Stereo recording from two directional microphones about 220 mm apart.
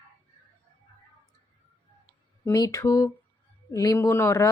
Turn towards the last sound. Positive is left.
turn(degrees=10)  # may be behind; listen again after turning